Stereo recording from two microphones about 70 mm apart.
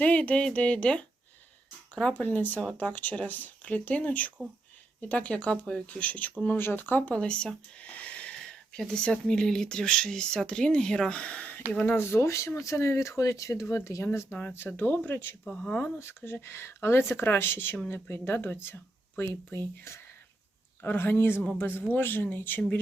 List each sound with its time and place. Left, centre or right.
0.0 s speech: left
2.2 s speech: left
7.1 s speech: centre
11.9 s speech: left
15.4 s speech: centre
16.0 s speech: left
19.9 s speech: left
20.8 s speech: left